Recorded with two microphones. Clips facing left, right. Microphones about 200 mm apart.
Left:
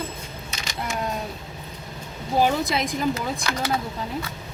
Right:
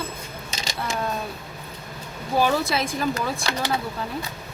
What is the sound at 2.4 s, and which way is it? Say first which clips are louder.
Speech: even; 20° left (ahead or behind).